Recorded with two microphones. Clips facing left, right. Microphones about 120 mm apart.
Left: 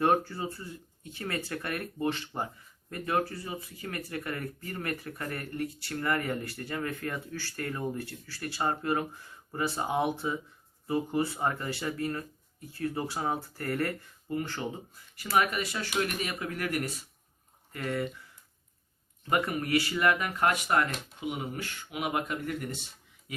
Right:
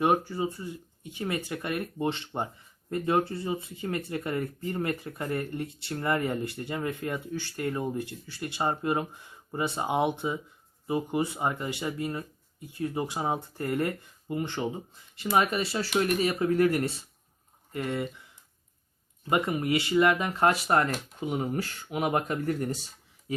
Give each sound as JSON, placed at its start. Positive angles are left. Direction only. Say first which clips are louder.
{"t": 0.0, "sound": "speech", "louder": "right 1 dB", "side_deg": -15}
{"t": 19.3, "sound": "speech", "louder": "right 2 dB", "side_deg": -20}